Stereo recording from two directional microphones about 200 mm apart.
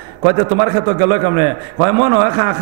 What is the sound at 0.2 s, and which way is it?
A man's voice, 20° right (ahead or behind).